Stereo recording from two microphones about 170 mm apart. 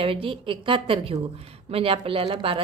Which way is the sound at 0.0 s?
30° right (ahead or behind).